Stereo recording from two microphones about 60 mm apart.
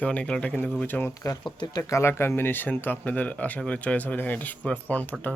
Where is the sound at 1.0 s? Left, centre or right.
Left.